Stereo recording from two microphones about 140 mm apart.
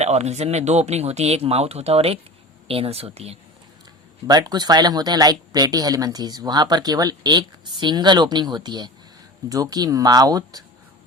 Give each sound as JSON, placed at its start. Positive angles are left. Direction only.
{"t": 0.0, "sound": "speech", "side_deg": -50}
{"t": 4.3, "sound": "speech", "side_deg": -30}